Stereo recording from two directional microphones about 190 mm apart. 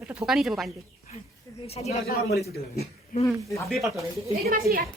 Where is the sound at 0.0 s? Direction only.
5° right (ahead or behind).